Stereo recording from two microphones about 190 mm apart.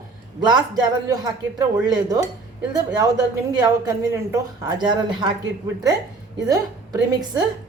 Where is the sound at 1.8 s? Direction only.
20° right (ahead or behind).